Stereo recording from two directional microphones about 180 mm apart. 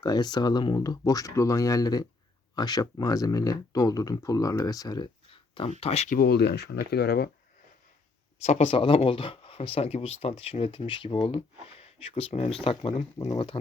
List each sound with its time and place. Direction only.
0.0 s speech: 25° left (ahead or behind)
6.1 s speech: 60° left (ahead or behind)
8.4 s speech: 35° left (ahead or behind)